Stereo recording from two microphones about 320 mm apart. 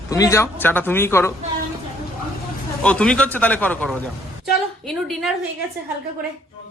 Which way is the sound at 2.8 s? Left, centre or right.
Centre.